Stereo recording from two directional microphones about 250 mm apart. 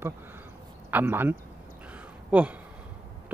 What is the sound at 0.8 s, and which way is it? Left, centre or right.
Speech, centre.